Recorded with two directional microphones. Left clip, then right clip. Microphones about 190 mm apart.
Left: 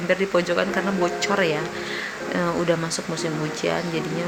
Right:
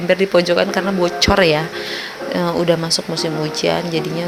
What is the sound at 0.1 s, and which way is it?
Speech, 20° right (ahead or behind).